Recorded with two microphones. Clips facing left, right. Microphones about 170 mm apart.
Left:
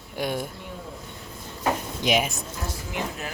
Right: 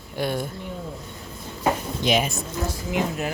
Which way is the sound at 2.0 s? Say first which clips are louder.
Right 1 dB; 10° left (ahead or behind).